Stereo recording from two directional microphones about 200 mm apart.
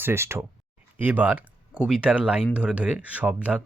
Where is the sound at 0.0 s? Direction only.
10° right (ahead or behind).